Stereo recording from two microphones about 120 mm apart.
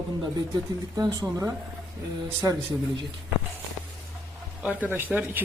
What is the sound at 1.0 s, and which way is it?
Speech, 35° right (ahead or behind).